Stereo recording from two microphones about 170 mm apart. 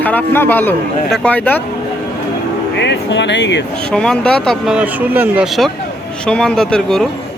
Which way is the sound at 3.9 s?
5° left (ahead or behind).